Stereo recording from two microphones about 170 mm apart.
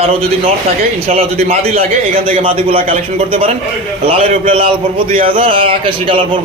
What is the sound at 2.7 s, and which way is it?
Speech, 55° right (ahead or behind).